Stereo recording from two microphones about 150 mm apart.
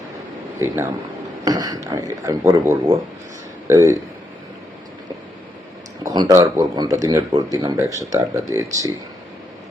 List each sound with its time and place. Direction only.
1.5 s speech: 25° right (ahead or behind)
6.0 s speech: 25° right (ahead or behind)